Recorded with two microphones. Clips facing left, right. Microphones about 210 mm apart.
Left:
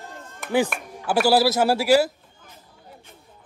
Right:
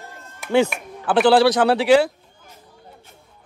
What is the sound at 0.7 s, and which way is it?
Speech, 5° left (ahead or behind).